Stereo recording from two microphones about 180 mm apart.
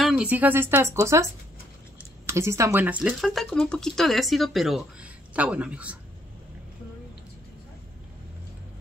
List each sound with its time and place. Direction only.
0.0 s speech: 5° right (ahead or behind)
2.2 s speech: 15° right (ahead or behind)